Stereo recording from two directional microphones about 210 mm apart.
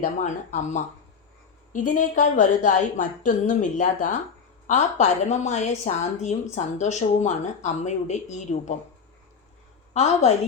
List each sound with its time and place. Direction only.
0.0 s a woman's voice: 35° left (ahead or behind)
9.9 s a woman's voice: 30° left (ahead or behind)